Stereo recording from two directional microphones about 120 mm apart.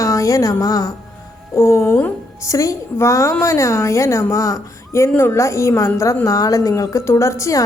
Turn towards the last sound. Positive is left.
turn(degrees=25)  # may be behind; listen again after turning